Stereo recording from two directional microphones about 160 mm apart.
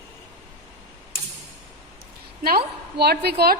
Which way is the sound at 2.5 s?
75° right (ahead or behind).